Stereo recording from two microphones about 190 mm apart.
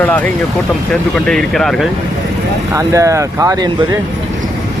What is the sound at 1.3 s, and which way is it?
Speech, centre (ahead or behind).